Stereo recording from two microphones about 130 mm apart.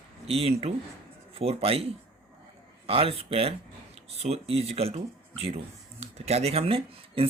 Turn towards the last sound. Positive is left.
turn(degrees=-45)  # may be behind; listen again after turning